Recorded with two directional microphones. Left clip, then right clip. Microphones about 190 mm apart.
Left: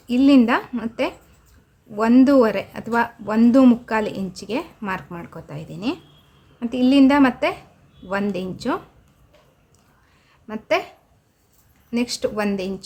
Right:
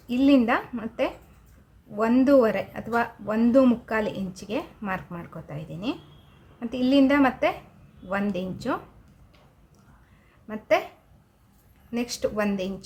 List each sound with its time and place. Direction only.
0.1 s speech: 25° left (ahead or behind)
10.4 s a woman's voice: 25° left (ahead or behind)
11.9 s speech: 25° left (ahead or behind)